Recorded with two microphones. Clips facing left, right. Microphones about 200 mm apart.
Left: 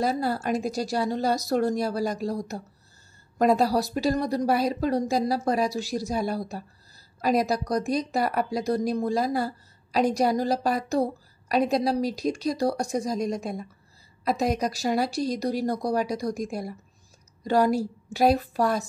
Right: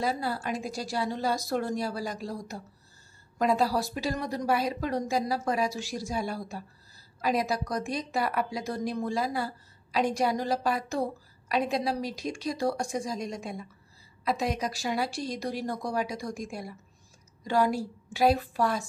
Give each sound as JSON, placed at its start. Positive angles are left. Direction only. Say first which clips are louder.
{"t": 0.0, "sound": "a woman's voice", "louder": "left 5 dB", "side_deg": 40}